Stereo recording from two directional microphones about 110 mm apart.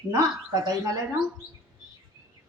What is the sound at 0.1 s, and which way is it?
Speech, 30° right (ahead or behind).